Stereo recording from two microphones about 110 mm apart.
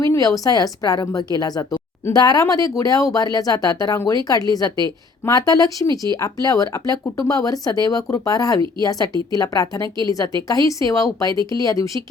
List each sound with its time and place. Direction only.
0.0 s speech: 30° left (ahead or behind)